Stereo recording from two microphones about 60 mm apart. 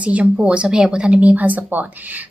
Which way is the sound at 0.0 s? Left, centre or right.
Right.